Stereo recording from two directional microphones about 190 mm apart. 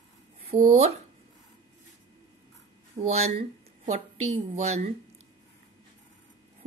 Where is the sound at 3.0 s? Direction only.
35° right (ahead or behind).